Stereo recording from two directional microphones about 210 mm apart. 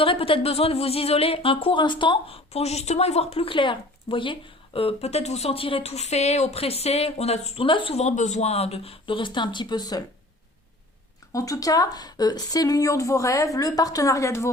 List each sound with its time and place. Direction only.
0.0 s speech: 25° left (ahead or behind)
11.3 s speech: 15° left (ahead or behind)